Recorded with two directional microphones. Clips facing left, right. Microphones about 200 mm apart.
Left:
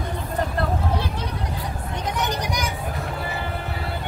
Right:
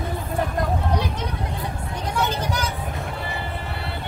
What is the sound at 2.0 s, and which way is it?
Children playing, 15° left (ahead or behind).